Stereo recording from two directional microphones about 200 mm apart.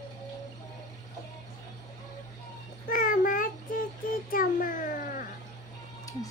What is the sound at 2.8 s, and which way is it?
Child singing, 45° left (ahead or behind).